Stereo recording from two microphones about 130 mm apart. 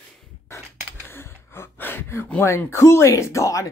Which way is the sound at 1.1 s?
20° left (ahead or behind).